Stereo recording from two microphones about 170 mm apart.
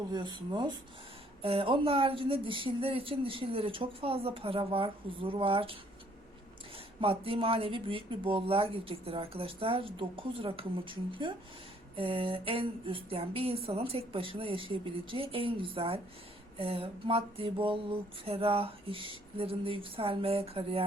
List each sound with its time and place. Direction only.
0.1 s a woman's voice: 25° right (ahead or behind)
7.0 s a woman's voice: 30° right (ahead or behind)